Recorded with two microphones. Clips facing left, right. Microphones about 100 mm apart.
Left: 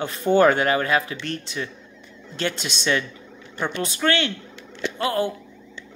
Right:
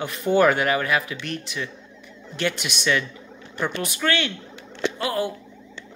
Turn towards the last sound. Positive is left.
turn(degrees=25)  # may be behind; listen again after turning